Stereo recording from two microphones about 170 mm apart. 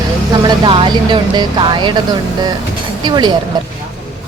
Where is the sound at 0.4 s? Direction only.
30° right (ahead or behind).